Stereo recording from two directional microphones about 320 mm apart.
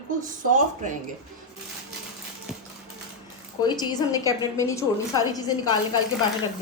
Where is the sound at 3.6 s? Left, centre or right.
Centre.